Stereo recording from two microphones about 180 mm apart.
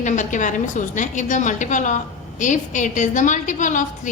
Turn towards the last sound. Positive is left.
turn(degrees=45)  # may be behind; listen again after turning